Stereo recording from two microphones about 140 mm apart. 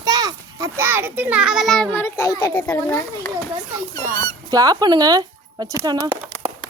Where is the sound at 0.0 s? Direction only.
25° right (ahead or behind); by 1.9 s centre (ahead or behind).